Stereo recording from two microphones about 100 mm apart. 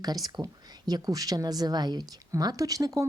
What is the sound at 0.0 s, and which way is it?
A woman's voice, 40° right (ahead or behind).